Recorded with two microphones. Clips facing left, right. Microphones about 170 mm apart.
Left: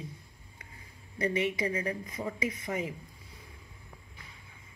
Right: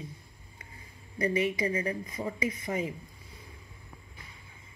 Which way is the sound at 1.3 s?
75° left (ahead or behind).